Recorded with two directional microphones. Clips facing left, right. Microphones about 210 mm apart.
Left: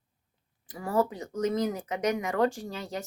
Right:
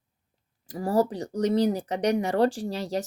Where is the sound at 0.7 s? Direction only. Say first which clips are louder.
Right 4 dB; 35° right (ahead or behind).